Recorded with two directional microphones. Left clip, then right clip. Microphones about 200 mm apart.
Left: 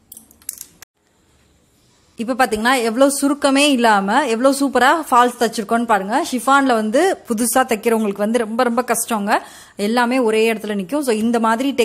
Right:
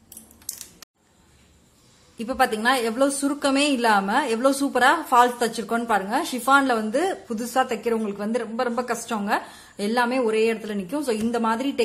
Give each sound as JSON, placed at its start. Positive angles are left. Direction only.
{"t": 2.1, "sound": "a woman's voice", "side_deg": 30}